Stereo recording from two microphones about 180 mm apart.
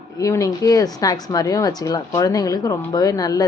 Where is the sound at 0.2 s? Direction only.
20° left (ahead or behind).